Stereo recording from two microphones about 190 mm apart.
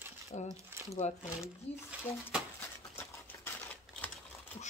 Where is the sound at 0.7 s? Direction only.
10° right (ahead or behind).